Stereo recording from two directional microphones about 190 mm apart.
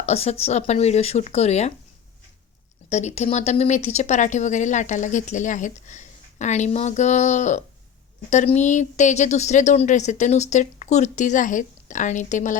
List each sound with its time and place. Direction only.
0.0 s speech: 35° left (ahead or behind)
2.9 s speech: 35° left (ahead or behind)